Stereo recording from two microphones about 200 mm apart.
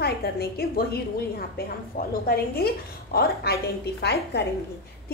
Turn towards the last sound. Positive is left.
turn(degrees=55)  # may be behind; listen again after turning